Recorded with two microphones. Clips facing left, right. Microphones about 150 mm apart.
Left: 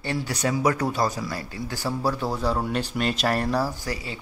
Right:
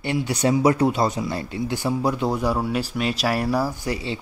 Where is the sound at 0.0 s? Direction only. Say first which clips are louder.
Right 4 dB; 20° right (ahead or behind).